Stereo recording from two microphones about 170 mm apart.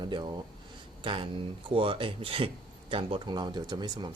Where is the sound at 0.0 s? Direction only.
25° right (ahead or behind).